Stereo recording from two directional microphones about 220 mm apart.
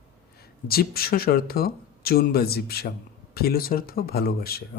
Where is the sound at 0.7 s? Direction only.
45° left (ahead or behind).